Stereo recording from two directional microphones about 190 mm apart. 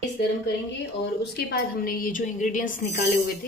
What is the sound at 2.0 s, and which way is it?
Speech, 45° left (ahead or behind).